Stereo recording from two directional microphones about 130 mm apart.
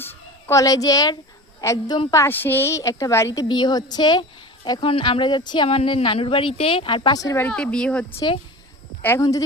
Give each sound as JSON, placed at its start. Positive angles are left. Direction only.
{"t": 0.0, "sound": "a sound", "side_deg": 15}
{"t": 1.6, "sound": "a woman's voice", "side_deg": 25}
{"t": 3.5, "sound": "speech", "side_deg": 35}
{"t": 5.6, "sound": "speech", "side_deg": 45}
{"t": 7.4, "sound": "speech", "side_deg": 5}